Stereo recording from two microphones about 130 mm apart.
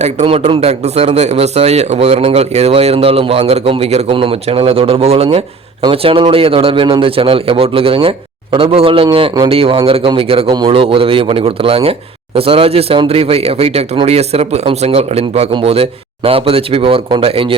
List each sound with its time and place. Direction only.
0.0 s speech: 55° right (ahead or behind)